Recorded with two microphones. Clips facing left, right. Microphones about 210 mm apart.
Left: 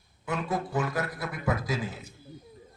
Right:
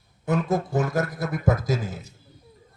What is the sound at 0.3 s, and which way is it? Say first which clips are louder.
Speech: right 7 dB; 40° right (ahead or behind).